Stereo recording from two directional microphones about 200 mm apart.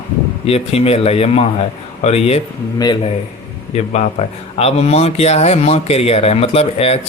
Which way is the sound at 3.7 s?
35° left (ahead or behind).